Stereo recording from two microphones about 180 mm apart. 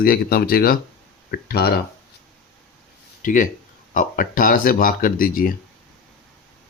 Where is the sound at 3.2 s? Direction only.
45° left (ahead or behind).